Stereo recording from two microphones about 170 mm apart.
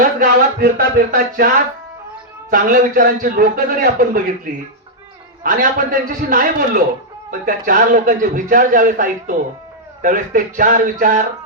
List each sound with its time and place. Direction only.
0.0 s a sound: 55° right (ahead or behind)
2.5 s a man's voice: 55° right (ahead or behind)
5.4 s a man's voice: 55° right (ahead or behind)